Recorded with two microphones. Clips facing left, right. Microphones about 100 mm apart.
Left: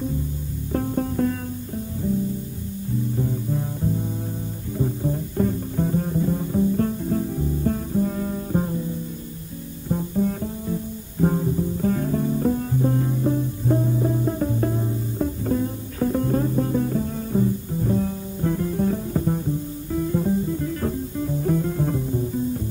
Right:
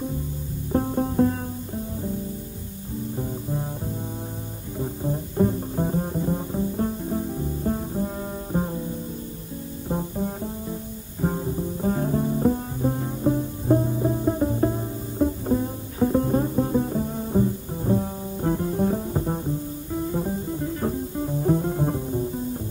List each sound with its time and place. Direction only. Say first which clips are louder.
0.7 s music: right 2 dB; 25° right (ahead or behind)
4.7 s music: left 3 dB; 25° right (ahead or behind)
9.8 s music: left 4 dB; 25° right (ahead or behind)
11.3 s music: left 4 dB; 25° right (ahead or behind)
20.1 s guitar: left 6 dB; 20° right (ahead or behind)
21.4 s music: right 1 dB; 25° right (ahead or behind)